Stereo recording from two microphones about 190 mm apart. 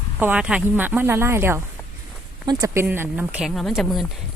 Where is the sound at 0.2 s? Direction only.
5° right (ahead or behind).